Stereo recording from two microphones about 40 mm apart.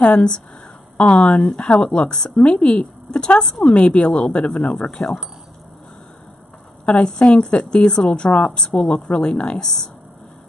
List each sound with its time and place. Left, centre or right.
0.0 s a woman's voice: left
7.1 s a woman's voice: left
9.6 s speech: centre